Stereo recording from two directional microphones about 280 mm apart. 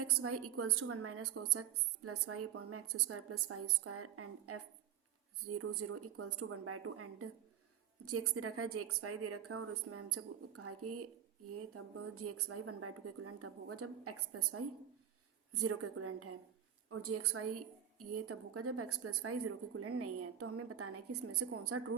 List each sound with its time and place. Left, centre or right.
0.0 s a woman's voice: right